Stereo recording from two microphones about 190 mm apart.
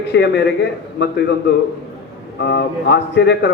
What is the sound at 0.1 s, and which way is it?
A man's voice, 65° left (ahead or behind).